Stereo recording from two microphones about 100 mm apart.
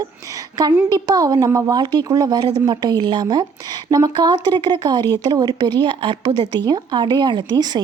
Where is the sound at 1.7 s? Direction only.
50° right (ahead or behind).